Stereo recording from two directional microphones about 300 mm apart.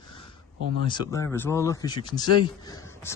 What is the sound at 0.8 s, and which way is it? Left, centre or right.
Speech, centre.